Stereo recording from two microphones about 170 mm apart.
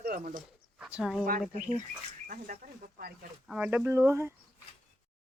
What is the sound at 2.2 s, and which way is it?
Speech, 55° right (ahead or behind).